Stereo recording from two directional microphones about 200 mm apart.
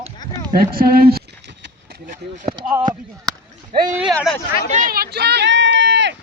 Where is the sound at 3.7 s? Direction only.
40° right (ahead or behind).